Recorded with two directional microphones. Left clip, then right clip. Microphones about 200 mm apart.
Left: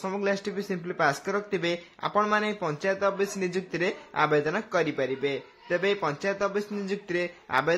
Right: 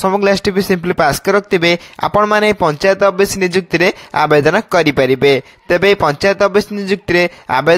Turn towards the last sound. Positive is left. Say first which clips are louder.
# right 14 dB
turn(degrees=-50)  # may be behind; listen again after turning